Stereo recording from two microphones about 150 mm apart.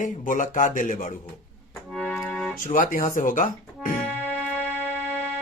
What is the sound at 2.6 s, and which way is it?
A man's voice, 65° left (ahead or behind).